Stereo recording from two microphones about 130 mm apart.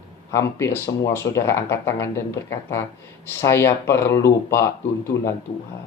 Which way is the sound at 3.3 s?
20° left (ahead or behind).